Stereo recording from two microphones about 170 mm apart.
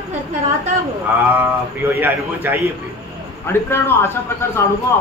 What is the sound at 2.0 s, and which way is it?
Speech, 10° right (ahead or behind).